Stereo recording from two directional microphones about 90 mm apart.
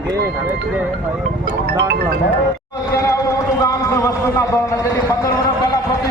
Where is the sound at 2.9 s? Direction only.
35° left (ahead or behind).